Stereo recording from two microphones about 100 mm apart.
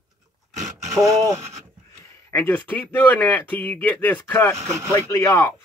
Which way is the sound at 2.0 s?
20° left (ahead or behind).